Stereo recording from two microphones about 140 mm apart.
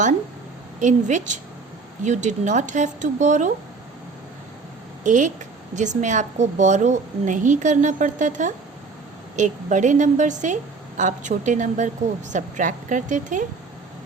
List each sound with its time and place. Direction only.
0.8 s a woman's voice: 60° right (ahead or behind)
5.0 s a woman's voice: 65° right (ahead or behind)